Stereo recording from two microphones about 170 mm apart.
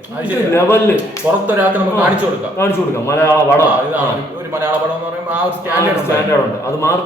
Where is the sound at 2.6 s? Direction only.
15° left (ahead or behind).